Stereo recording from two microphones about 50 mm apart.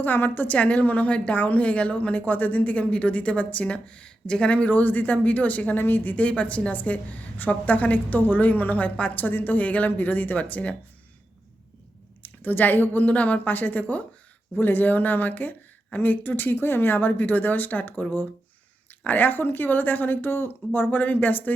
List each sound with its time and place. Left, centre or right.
0.0 s speech: left
0.5 s a woman's voice: left
9.1 s speech: left
12.2 s speech: left
19.0 s speech: left